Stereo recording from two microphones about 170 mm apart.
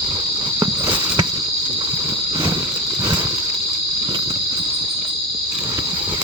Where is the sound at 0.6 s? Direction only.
20° right (ahead or behind).